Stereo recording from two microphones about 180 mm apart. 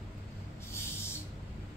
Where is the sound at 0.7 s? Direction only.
15° left (ahead or behind).